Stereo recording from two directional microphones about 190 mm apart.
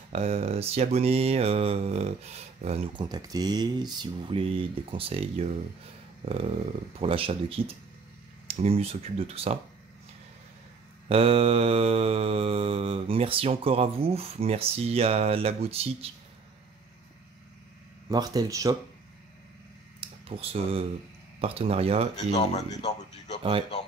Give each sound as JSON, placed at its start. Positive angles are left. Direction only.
{"t": 0.1, "sound": "mantra", "side_deg": -30}
{"t": 3.1, "sound": "speech", "side_deg": -20}
{"t": 7.0, "sound": "speech", "side_deg": -30}
{"t": 8.5, "sound": "mantra", "side_deg": -30}
{"t": 11.1, "sound": "mantra", "side_deg": -30}
{"t": 18.0, "sound": "speech", "side_deg": -20}
{"t": 20.0, "sound": "a sound", "side_deg": -30}
{"t": 21.4, "sound": "mantra", "side_deg": -30}
{"t": 22.1, "sound": "speech", "side_deg": 35}